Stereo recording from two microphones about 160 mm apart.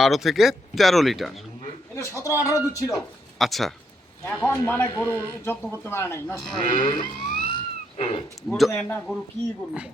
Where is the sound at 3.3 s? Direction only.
Centre (ahead or behind).